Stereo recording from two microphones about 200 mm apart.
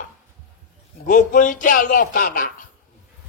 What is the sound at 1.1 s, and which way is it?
A man's voice, 45° left (ahead or behind).